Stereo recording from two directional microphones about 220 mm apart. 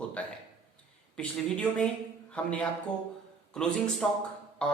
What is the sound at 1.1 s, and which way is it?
A man's voice, 5° left (ahead or behind).